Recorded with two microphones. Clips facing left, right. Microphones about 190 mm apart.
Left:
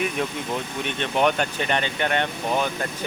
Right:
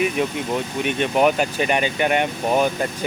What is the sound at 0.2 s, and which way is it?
Speech, 5° right (ahead or behind).